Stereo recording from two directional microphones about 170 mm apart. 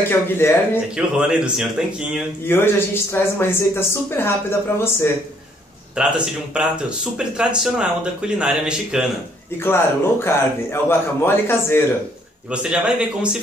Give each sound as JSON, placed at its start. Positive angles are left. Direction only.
{"t": 0.1, "sound": "speech", "side_deg": 15}
{"t": 0.9, "sound": "speech", "side_deg": -5}
{"t": 2.4, "sound": "speech", "side_deg": 15}
{"t": 5.9, "sound": "speech", "side_deg": -5}
{"t": 9.6, "sound": "speech", "side_deg": 15}
{"t": 12.4, "sound": "a man's voice", "side_deg": -5}